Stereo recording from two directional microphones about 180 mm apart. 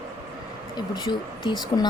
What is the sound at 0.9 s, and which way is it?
Speech, 25° left (ahead or behind).